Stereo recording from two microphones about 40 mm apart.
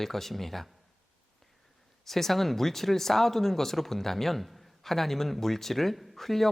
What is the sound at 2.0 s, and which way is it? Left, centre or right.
Speech, centre.